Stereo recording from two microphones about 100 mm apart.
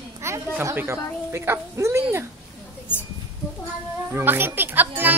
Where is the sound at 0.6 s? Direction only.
25° right (ahead or behind).